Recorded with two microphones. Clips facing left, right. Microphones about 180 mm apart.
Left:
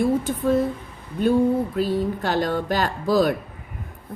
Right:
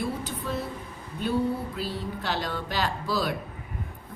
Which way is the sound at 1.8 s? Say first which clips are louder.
Left 10 dB; 45° left (ahead or behind).